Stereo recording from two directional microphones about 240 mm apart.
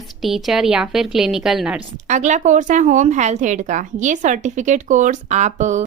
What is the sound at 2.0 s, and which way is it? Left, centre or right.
Speech, right.